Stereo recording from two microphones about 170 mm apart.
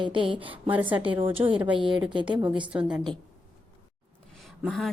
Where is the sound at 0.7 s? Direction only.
10° right (ahead or behind).